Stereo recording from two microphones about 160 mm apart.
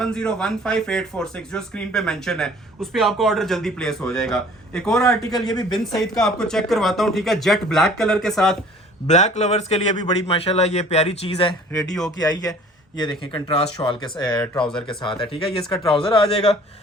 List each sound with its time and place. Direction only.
0.0 s speech: 5° left (ahead or behind)
5.2 s a man's voice: 25° left (ahead or behind)
6.1 s speech: 5° left (ahead or behind)
9.0 s a man's voice: 45° left (ahead or behind)
11.7 s speech: 5° left (ahead or behind)
12.1 s a man's voice: 25° left (ahead or behind)
14.3 s speech: 5° left (ahead or behind)
14.8 s a man's voice: 30° left (ahead or behind)
15.7 s speech: 5° left (ahead or behind)
16.0 s a man's voice: 35° left (ahead or behind)